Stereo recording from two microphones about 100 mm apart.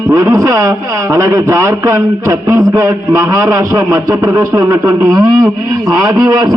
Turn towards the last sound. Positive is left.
turn(degrees=-40)  # may be behind; listen again after turning